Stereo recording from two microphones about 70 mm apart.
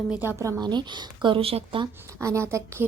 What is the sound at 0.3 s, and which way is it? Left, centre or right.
Speech, right.